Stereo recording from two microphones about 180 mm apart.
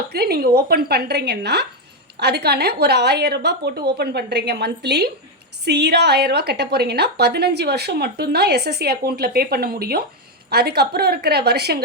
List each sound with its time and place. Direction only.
0.1 s a woman's voice: 60° right (ahead or behind)